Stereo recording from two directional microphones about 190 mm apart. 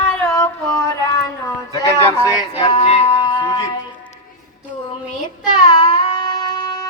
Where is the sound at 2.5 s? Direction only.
30° left (ahead or behind).